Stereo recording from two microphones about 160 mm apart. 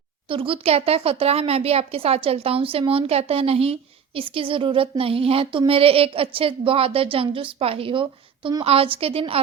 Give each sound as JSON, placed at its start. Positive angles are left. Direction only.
{"t": 0.3, "sound": "speech", "side_deg": -35}